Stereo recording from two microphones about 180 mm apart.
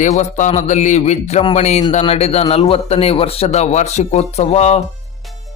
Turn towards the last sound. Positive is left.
turn(degrees=35)  # may be behind; listen again after turning